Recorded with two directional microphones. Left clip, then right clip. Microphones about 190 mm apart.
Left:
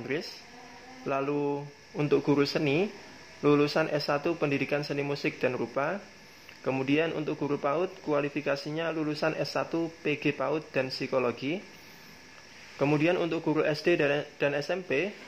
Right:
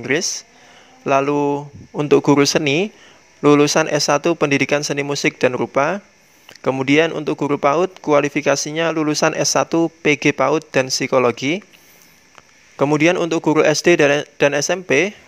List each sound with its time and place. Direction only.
0.0 s speech: 45° right (ahead or behind)
12.7 s speech: 45° right (ahead or behind)